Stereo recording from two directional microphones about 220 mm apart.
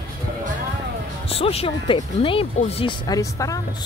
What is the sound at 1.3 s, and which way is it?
Speech, 25° left (ahead or behind).